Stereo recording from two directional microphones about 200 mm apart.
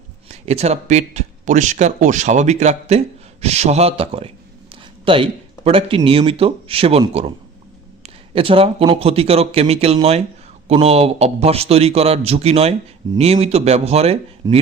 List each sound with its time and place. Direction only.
0.3 s speech: 30° right (ahead or behind)
14.4 s speech: 20° right (ahead or behind)